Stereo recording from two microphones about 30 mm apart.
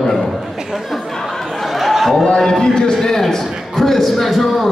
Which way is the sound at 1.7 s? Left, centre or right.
Centre.